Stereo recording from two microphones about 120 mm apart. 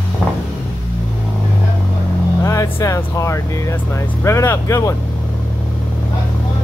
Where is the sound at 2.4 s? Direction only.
25° left (ahead or behind).